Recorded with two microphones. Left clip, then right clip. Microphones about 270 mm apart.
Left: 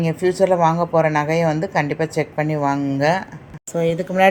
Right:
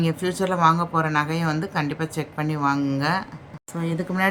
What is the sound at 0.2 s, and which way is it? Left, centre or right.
Speech, centre.